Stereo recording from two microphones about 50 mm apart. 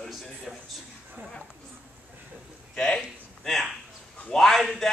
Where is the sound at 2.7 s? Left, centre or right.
Centre.